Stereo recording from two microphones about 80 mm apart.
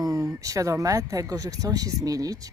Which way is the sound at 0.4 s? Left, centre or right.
Right.